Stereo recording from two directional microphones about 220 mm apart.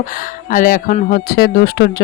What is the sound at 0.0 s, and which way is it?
Speech, 40° left (ahead or behind).